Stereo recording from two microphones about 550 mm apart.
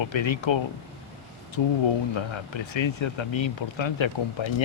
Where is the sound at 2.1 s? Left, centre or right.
Left.